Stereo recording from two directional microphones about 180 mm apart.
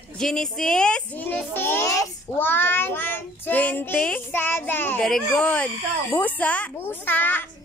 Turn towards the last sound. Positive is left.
turn(degrees=10)  # may be behind; listen again after turning